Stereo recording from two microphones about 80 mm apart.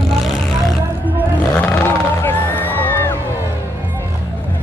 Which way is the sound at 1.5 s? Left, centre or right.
Centre.